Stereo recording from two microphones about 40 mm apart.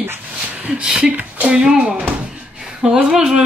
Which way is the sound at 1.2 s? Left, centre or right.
Right.